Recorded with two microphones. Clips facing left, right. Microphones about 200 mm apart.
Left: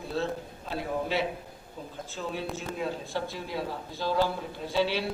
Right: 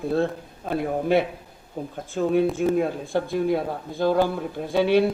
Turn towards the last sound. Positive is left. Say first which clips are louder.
# right 9 dB
turn(degrees=-55)  # may be behind; listen again after turning